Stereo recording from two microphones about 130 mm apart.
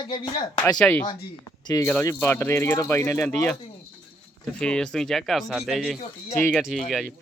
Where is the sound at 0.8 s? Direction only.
10° left (ahead or behind).